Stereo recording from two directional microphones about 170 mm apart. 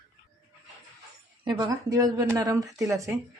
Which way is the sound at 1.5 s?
20° right (ahead or behind).